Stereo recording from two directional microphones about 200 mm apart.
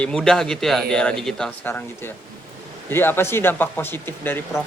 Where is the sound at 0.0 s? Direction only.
5° left (ahead or behind).